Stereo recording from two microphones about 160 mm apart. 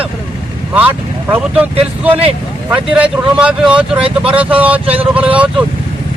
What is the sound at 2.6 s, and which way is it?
Speech, 5° right (ahead or behind).